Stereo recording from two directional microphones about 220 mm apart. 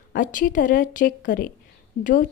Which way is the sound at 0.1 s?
35° left (ahead or behind).